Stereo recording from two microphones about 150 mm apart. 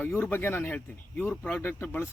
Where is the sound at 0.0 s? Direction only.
10° left (ahead or behind).